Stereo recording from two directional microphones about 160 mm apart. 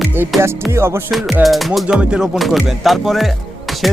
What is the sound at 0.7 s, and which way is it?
Music, 15° right (ahead or behind).